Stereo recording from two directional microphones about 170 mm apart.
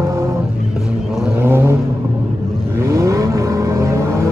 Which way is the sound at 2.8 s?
20° right (ahead or behind).